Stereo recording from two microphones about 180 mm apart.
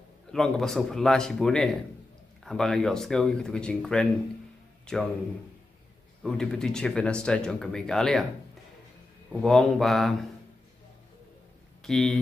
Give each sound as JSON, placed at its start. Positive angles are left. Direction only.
{"t": 0.3, "sound": "speech", "side_deg": 0}
{"t": 6.2, "sound": "speech", "side_deg": 5}
{"t": 9.3, "sound": "speech", "side_deg": 0}
{"t": 11.8, "sound": "speech", "side_deg": 0}